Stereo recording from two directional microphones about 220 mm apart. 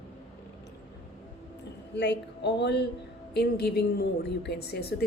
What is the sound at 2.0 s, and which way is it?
A woman's voice, 50° left (ahead or behind).